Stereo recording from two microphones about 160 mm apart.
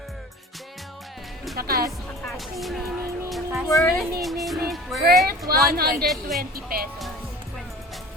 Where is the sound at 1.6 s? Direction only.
70° right (ahead or behind).